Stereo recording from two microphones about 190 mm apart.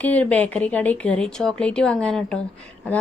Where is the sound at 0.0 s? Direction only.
10° left (ahead or behind).